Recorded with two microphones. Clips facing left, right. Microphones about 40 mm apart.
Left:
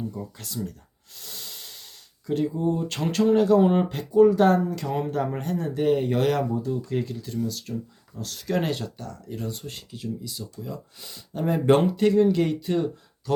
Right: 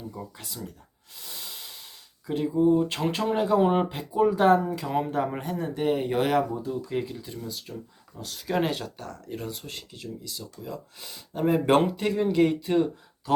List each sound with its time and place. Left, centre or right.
0.1 s speech: centre
8.8 s speech: right
9.6 s speech: centre
11.1 s speech: centre